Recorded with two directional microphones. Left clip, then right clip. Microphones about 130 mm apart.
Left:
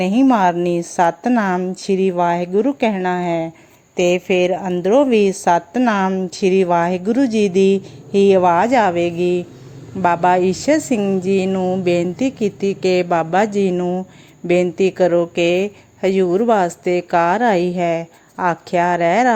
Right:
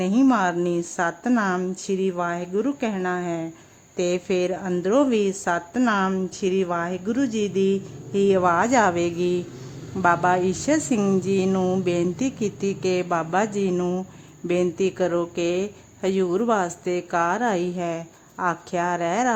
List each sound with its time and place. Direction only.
0.3 s a woman's voice: 30° left (ahead or behind); by 9.4 s 10° left (ahead or behind)
10.0 s a woman's voice: 25° left (ahead or behind)
11.2 s a sound: 15° left (ahead or behind)
11.5 s music: centre (ahead or behind)
11.9 s a woman's voice: 20° left (ahead or behind)
13.7 s a sound: 10° left (ahead or behind)
14.4 s a woman's voice: 25° left (ahead or behind)